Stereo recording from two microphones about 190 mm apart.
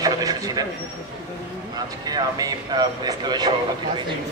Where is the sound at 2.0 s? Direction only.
20° right (ahead or behind).